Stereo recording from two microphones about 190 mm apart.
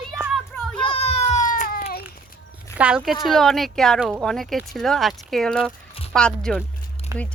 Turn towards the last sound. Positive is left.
turn(degrees=-15)  # may be behind; listen again after turning